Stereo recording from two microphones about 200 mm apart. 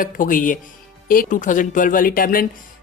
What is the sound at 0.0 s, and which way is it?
Speech, 45° left (ahead or behind).